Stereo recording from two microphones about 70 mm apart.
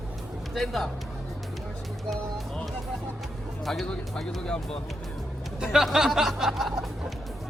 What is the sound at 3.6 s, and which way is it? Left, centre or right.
Speech, centre.